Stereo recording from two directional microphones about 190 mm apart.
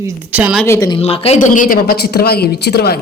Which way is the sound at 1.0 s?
30° left (ahead or behind).